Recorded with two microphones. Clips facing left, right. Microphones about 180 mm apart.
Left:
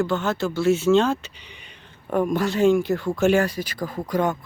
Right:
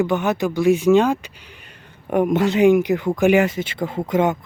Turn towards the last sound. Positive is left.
turn(degrees=-20)  # may be behind; listen again after turning